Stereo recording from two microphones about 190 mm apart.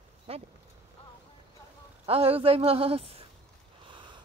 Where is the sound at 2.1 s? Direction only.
30° right (ahead or behind).